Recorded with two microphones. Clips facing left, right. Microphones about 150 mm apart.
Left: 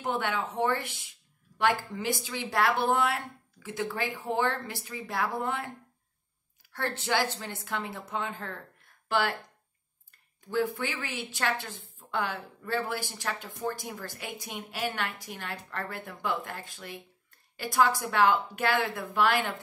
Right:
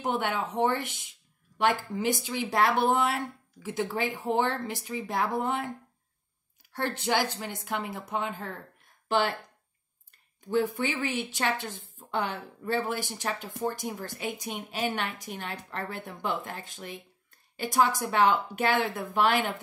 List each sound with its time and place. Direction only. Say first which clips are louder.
0.0 s speech: right 1 dB; 15° right (ahead or behind)
6.7 s speech: right 2 dB; 15° right (ahead or behind)
10.9 s speech: right 6 dB; 15° right (ahead or behind)